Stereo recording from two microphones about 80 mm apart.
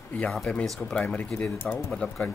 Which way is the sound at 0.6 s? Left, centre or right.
Centre.